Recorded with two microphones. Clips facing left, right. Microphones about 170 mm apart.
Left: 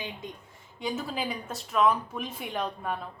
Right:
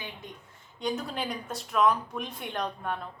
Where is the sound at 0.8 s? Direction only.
5° left (ahead or behind).